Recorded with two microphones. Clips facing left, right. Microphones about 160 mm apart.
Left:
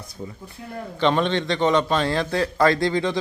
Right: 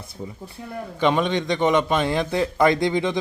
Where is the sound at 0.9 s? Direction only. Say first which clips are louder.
Even; 10° right (ahead or behind).